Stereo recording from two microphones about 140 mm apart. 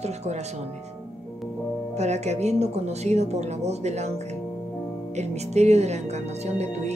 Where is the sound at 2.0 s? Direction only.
50° right (ahead or behind).